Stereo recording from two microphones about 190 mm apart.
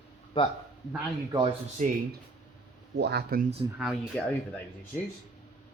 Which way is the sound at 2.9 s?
60° right (ahead or behind).